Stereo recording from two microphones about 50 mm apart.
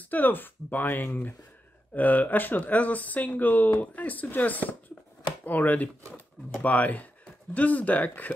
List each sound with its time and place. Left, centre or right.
0.1 s speech: left